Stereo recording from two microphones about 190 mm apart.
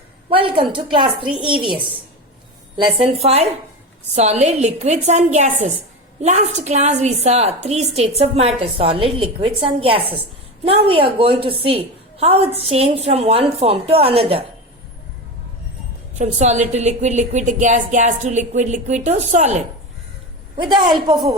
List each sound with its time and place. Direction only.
0.3 s a woman's voice: 25° right (ahead or behind)
16.1 s a woman's voice: 35° right (ahead or behind)
20.6 s a woman's voice: 25° right (ahead or behind)